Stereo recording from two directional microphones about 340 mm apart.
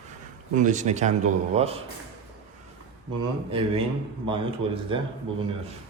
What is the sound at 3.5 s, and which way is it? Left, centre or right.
A man's voice, centre.